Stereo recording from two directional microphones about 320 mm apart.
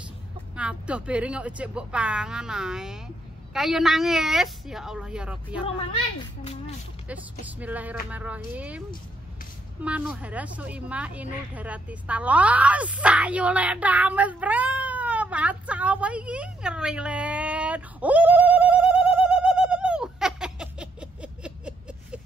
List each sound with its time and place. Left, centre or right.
0.6 s speech: centre
5.6 s speech: centre
7.1 s speech: centre
9.8 s speech: centre
11.5 s a sound: centre